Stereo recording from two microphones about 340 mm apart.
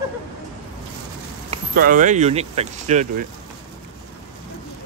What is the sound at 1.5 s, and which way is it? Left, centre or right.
Speech, right.